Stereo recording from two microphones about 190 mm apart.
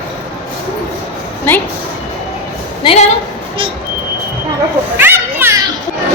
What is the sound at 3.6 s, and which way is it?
Speech, 25° right (ahead or behind).